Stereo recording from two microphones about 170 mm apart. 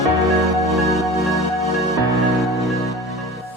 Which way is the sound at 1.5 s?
35° left (ahead or behind).